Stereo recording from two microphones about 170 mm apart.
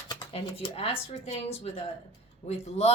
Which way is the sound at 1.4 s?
35° left (ahead or behind).